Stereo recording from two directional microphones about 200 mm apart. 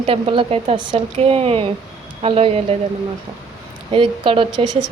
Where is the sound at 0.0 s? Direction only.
25° right (ahead or behind).